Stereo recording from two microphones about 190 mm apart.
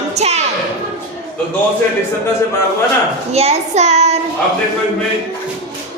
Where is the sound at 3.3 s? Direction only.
35° right (ahead or behind).